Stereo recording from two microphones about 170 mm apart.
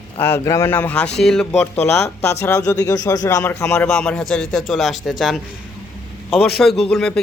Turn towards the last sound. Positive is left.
turn(degrees=5)  # may be behind; listen again after turning